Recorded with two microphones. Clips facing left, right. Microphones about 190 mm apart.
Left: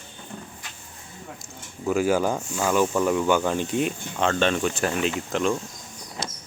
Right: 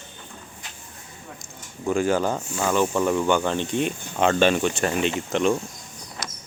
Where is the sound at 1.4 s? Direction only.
5° left (ahead or behind).